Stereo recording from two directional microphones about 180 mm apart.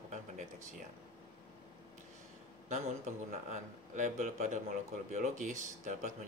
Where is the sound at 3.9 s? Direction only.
45° right (ahead or behind).